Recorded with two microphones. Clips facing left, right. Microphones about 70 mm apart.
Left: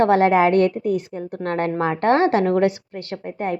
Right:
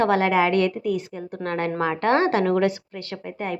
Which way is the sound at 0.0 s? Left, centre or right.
Left.